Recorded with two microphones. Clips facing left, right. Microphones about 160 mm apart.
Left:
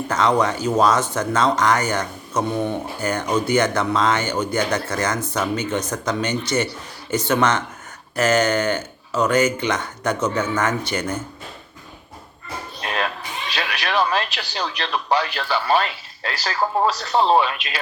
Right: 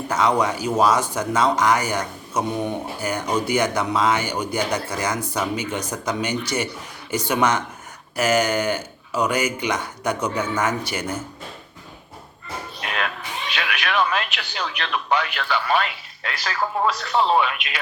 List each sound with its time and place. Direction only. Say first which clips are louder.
0.1 s speech: left 1 dB; 10° right (ahead or behind)
12.8 s music: left 3 dB; 35° left (ahead or behind)
13.5 s speech: left 1 dB; 35° left (ahead or behind)